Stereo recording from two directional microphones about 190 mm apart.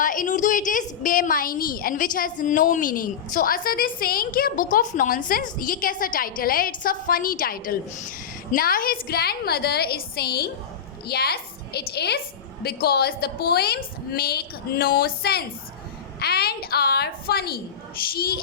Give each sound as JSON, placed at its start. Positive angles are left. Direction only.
{"t": 0.0, "sound": "a woman's voice", "side_deg": 45}